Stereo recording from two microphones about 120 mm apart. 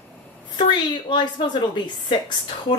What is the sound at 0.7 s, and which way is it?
A woman's voice, 40° left (ahead or behind).